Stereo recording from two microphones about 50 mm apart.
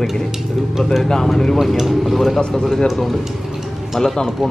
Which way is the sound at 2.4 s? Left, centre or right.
Centre.